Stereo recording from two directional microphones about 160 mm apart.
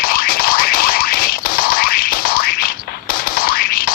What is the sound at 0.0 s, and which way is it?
Boing, 65° left (ahead or behind).